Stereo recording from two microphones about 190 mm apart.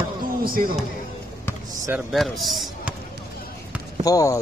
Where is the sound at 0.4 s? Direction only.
50° right (ahead or behind).